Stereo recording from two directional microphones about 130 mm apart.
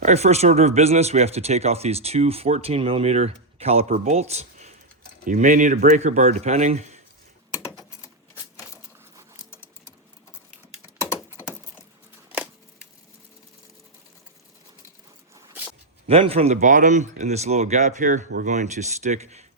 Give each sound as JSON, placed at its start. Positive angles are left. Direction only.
{"t": 0.0, "sound": "speech", "side_deg": -60}
{"t": 5.2, "sound": "speech", "side_deg": -85}
{"t": 7.6, "sound": "typing", "side_deg": 25}
{"t": 11.1, "sound": "a sound", "side_deg": 20}
{"t": 16.0, "sound": "speech", "side_deg": -50}
{"t": 16.6, "sound": "speech", "side_deg": -75}